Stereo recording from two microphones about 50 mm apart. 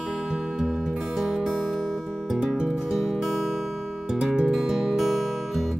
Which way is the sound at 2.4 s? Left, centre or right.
Centre.